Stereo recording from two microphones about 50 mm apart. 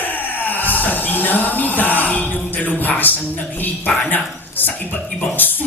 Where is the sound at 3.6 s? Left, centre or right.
Left.